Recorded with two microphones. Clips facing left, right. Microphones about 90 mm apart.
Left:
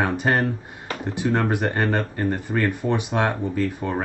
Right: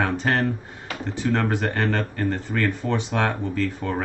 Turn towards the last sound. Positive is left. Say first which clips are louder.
# left 1 dB
turn(degrees=15)  # may be behind; listen again after turning